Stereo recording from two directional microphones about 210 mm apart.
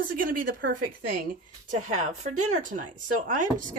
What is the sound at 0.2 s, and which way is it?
Speech, 40° right (ahead or behind).